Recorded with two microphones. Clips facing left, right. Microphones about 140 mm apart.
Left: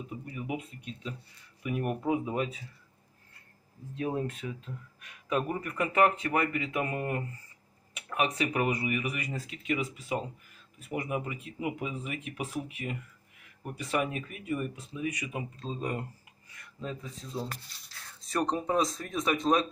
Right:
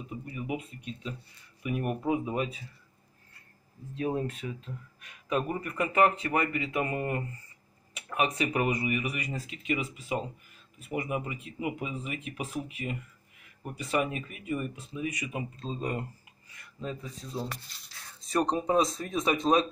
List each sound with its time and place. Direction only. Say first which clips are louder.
0.1 s speech: right 2 dB; centre (ahead or behind)
4.0 s speech: right 1 dB; 5° left (ahead or behind)
13.7 s speech: right 1 dB; centre (ahead or behind)
18.3 s speech: right 3 dB; 20° right (ahead or behind)